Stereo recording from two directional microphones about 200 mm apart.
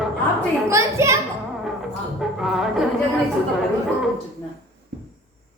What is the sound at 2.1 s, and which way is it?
Music, centre (ahead or behind).